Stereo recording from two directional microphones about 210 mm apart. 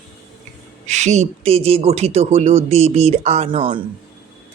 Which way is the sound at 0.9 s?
35° right (ahead or behind).